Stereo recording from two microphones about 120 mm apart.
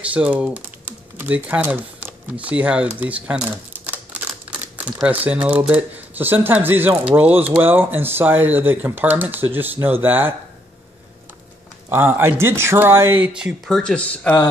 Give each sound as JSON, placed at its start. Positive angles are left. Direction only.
{"t": 0.1, "sound": "speech", "side_deg": -10}
{"t": 3.0, "sound": "typewriter", "side_deg": -10}
{"t": 4.5, "sound": "crumpling", "side_deg": -10}
{"t": 5.0, "sound": "speech", "side_deg": -10}
{"t": 11.9, "sound": "speech", "side_deg": -20}
{"t": 13.3, "sound": "speech", "side_deg": -10}
{"t": 13.7, "sound": "speech", "side_deg": 5}